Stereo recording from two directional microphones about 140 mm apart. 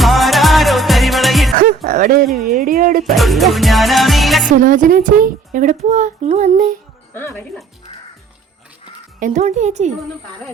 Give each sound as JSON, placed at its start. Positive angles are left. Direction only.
{"t": 0.0, "sound": "music", "side_deg": 0}
{"t": 1.5, "sound": "music", "side_deg": -75}
{"t": 2.3, "sound": "speech", "side_deg": 0}
{"t": 2.6, "sound": "speech", "side_deg": -80}
{"t": 3.2, "sound": "music", "side_deg": 0}
{"t": 4.4, "sound": "speech", "side_deg": -70}
{"t": 7.1, "sound": "speech", "side_deg": 15}
{"t": 9.2, "sound": "speech", "side_deg": -55}